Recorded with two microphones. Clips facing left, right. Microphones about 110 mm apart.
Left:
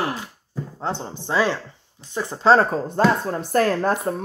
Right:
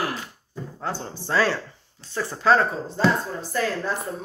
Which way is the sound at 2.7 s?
55° left (ahead or behind).